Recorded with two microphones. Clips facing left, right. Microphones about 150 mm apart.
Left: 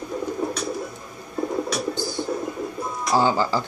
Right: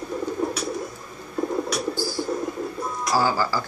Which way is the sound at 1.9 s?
20° left (ahead or behind).